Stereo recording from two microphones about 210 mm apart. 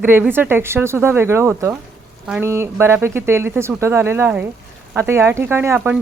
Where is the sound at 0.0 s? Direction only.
10° right (ahead or behind).